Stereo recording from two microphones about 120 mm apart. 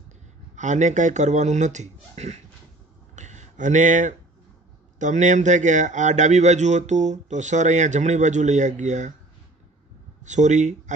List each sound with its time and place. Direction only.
0.6 s speech: 90° right; by 2.4 s 65° right (ahead or behind)
3.2 s a sound: 85° right
4.9 s a man's voice: 90° right
10.2 s a man's voice: 90° right